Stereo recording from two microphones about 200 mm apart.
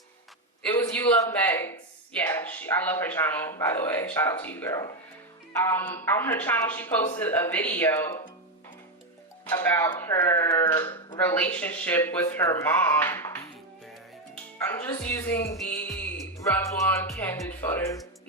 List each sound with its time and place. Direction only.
0.8 s speech: 10° left (ahead or behind)
9.6 s speech: 15° left (ahead or behind)
10.8 s speech: 25° left (ahead or behind)
11.2 s speech: 10° left (ahead or behind)
14.7 s speech: 10° left (ahead or behind)